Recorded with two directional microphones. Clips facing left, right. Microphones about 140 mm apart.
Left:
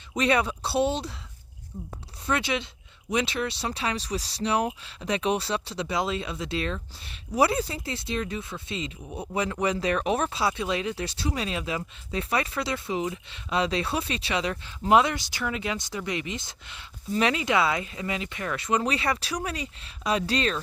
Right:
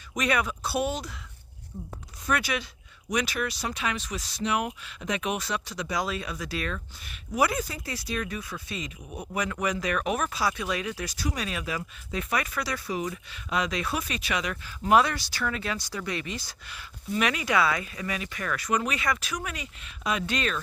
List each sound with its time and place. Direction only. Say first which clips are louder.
0.1 s speech: left 3 dB; 30° left (ahead or behind)
2.2 s speech: left 1 dB; 25° left (ahead or behind)